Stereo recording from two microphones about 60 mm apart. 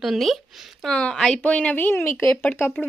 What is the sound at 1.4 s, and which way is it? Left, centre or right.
Speech, left.